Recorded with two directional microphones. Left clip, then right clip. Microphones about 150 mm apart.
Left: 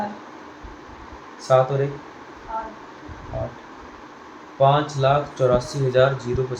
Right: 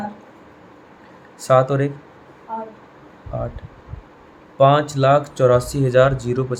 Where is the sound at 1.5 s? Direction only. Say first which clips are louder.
Right 2 dB; 70° right (ahead or behind).